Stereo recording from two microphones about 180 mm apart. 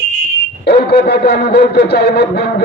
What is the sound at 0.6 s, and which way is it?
A man's voice, 65° left (ahead or behind).